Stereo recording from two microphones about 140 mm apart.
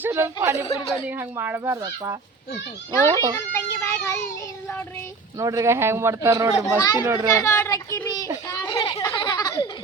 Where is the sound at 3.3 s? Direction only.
20° left (ahead or behind).